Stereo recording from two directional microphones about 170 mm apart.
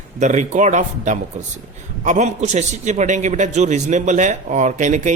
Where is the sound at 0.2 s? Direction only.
45° right (ahead or behind).